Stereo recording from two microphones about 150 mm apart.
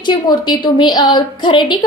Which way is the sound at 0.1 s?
30° left (ahead or behind).